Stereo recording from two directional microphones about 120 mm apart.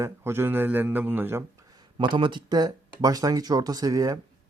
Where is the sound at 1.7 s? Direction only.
40° right (ahead or behind).